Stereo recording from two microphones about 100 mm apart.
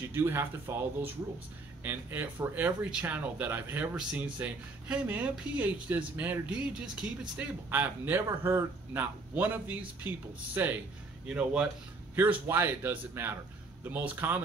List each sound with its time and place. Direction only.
0.1 s speech: 25° right (ahead or behind)
12.2 s speech: 20° right (ahead or behind)